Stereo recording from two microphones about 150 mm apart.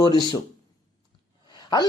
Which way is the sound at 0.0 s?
30° left (ahead or behind).